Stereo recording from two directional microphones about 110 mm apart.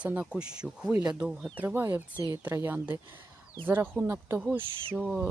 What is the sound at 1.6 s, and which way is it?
Speech, 20° right (ahead or behind).